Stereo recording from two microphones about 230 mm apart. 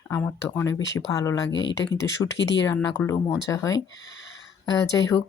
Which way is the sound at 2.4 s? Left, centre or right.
Left.